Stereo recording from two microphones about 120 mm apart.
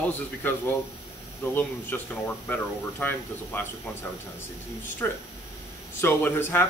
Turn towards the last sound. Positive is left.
turn(degrees=20)  # may be behind; listen again after turning